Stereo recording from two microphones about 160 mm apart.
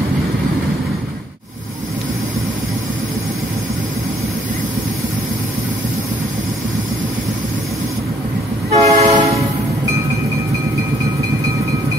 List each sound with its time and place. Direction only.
8.6 s train: 40° right (ahead or behind)